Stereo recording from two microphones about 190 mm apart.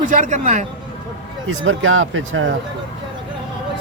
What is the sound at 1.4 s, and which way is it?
Speech, 90° right.